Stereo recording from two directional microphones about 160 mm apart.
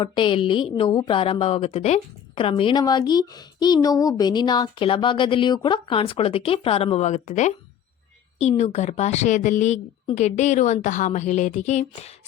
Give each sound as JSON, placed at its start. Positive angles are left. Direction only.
{"t": 0.0, "sound": "a woman's voice", "side_deg": 30}